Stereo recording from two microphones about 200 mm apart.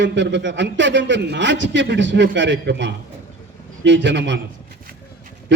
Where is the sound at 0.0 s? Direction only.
65° right (ahead or behind).